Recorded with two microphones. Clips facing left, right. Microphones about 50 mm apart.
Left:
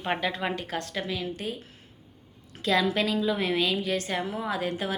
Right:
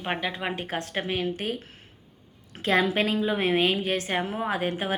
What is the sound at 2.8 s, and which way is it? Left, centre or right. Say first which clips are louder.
A woman's voice: right 1 dB; right.